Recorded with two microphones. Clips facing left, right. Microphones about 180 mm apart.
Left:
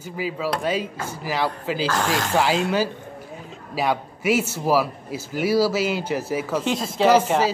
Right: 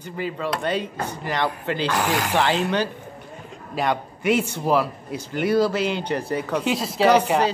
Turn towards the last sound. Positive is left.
turn(degrees=5)  # may be behind; listen again after turning